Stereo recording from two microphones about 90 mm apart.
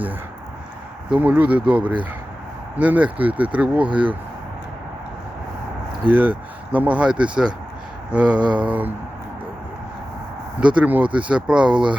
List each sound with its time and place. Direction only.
1.1 s speech: 20° right (ahead or behind)
3.8 s speech: 65° right (ahead or behind)
6.1 s speech: 15° right (ahead or behind)
10.6 s speech: 15° right (ahead or behind)